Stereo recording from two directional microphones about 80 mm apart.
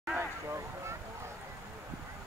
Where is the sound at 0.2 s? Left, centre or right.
Right.